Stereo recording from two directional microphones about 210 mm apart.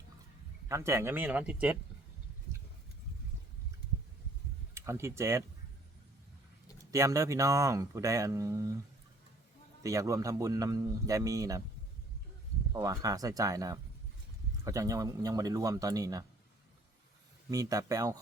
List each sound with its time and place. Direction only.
0.7 s speech: 15° right (ahead or behind)
4.7 s speech: 10° right (ahead or behind)
6.9 s speech: 15° right (ahead or behind)
9.8 s speech: 15° right (ahead or behind)
12.7 s speech: 15° right (ahead or behind)
17.5 s speech: 15° right (ahead or behind)